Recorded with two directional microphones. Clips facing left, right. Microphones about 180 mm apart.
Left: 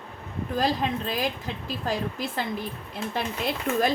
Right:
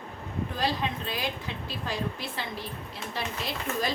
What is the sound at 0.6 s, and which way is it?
Speech, 45° left (ahead or behind).